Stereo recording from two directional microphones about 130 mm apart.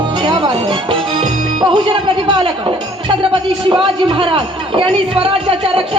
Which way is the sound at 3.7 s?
40° right (ahead or behind).